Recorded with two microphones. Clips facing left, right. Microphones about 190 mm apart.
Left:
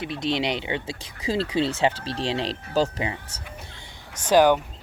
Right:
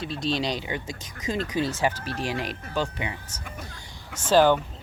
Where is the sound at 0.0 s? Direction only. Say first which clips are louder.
Left 2 dB; 20° left (ahead or behind).